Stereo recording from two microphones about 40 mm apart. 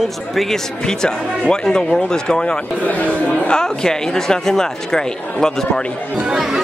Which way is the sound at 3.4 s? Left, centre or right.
Centre.